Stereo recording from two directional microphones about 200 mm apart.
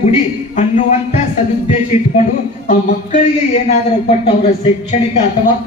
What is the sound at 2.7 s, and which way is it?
Speech, 40° left (ahead or behind).